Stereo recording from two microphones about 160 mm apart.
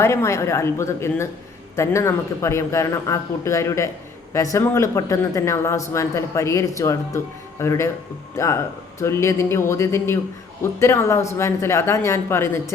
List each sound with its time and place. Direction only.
0.0 s a man's voice: 15° left (ahead or behind)